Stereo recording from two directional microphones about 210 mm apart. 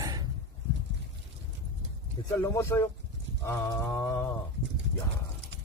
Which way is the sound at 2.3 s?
15° left (ahead or behind).